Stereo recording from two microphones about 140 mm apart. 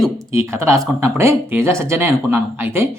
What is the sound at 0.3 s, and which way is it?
A man's voice, 20° right (ahead or behind).